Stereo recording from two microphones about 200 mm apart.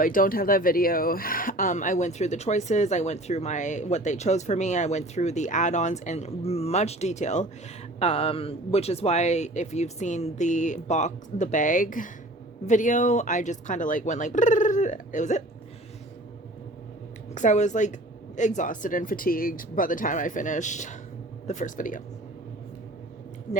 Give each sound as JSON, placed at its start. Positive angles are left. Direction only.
{"t": 0.0, "sound": "speech", "side_deg": 45}
{"t": 17.3, "sound": "speech", "side_deg": 35}